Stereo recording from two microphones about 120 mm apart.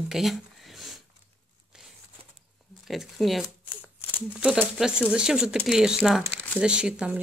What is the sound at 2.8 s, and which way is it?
Speech, centre (ahead or behind).